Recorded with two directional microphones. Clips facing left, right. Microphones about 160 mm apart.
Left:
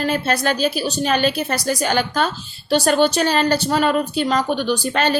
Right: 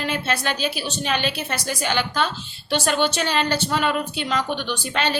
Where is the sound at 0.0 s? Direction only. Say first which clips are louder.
Left 5 dB; 40° left (ahead or behind).